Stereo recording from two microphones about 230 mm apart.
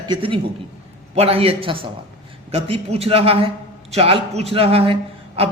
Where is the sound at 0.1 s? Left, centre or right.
Right.